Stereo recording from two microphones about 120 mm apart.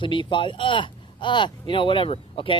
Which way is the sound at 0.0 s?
45° left (ahead or behind).